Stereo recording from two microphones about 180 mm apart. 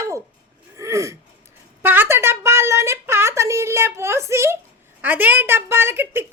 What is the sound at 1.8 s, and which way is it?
A woman's voice, 10° right (ahead or behind).